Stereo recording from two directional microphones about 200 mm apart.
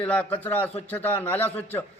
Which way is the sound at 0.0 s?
5° left (ahead or behind).